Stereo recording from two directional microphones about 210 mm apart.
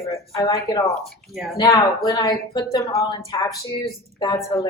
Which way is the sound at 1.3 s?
Centre (ahead or behind).